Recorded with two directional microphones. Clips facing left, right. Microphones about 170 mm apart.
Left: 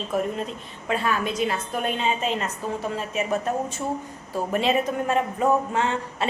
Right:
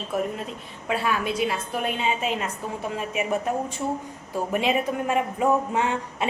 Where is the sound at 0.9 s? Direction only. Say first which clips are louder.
Even; 5° right (ahead or behind).